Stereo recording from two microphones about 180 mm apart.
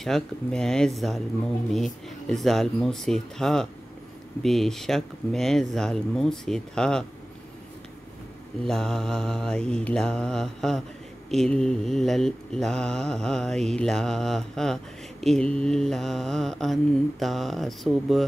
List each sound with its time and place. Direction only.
0.0 s mantra: 5° left (ahead or behind)
8.6 s mantra: centre (ahead or behind)